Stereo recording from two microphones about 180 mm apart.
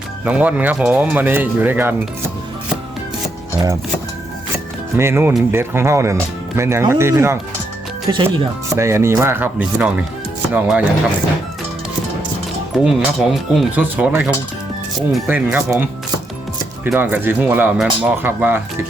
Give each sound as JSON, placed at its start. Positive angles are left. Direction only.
{"t": 0.3, "sound": "speech", "side_deg": -5}
{"t": 4.9, "sound": "speech", "side_deg": -15}
{"t": 12.7, "sound": "speech", "side_deg": 0}